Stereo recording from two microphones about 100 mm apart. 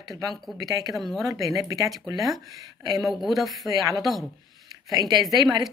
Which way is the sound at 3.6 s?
35° right (ahead or behind).